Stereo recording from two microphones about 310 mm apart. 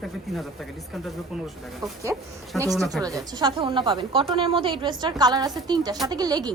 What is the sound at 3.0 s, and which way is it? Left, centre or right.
A woman's voice, centre.